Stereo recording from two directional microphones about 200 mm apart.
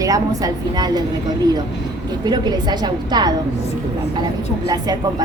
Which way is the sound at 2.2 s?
20° right (ahead or behind).